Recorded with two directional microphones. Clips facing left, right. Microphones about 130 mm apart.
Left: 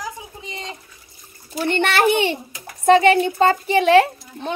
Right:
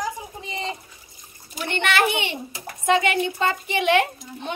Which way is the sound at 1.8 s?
35° left (ahead or behind).